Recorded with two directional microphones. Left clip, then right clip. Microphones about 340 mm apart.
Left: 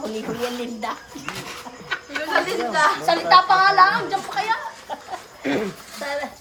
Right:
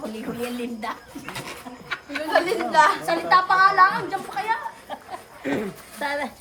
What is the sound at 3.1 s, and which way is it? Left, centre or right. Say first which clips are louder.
A woman's voice: left 4 dB; centre.